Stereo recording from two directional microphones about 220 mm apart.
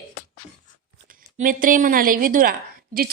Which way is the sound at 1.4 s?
40° right (ahead or behind).